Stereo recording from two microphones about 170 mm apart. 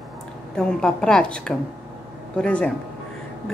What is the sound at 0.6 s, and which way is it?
Speech, 5° left (ahead or behind).